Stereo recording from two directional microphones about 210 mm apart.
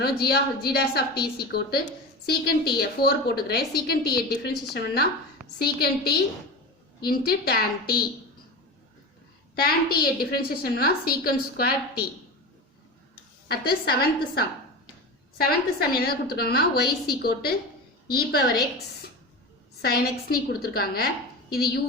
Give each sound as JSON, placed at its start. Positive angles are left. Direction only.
{"t": 0.0, "sound": "a woman's voice", "side_deg": 50}
{"t": 9.6, "sound": "a woman's voice", "side_deg": 45}
{"t": 13.5, "sound": "a woman's voice", "side_deg": 50}